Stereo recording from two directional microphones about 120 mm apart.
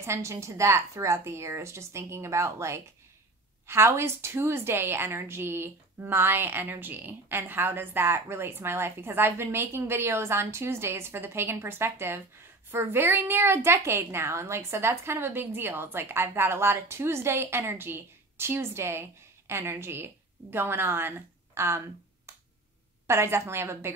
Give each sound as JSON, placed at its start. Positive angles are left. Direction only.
{"t": 0.0, "sound": "a woman's voice", "side_deg": -25}